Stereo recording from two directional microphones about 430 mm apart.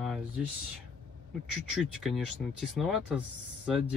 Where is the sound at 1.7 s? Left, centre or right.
Centre.